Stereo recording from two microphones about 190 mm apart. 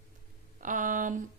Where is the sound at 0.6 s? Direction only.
45° right (ahead or behind).